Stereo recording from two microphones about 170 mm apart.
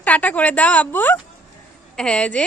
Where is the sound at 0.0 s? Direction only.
10° left (ahead or behind).